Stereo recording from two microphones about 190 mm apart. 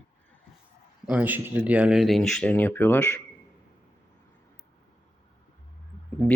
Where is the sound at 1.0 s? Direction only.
5° right (ahead or behind); by 3.2 s 10° left (ahead or behind).